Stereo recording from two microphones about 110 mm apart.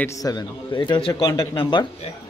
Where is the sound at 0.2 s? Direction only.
35° left (ahead or behind).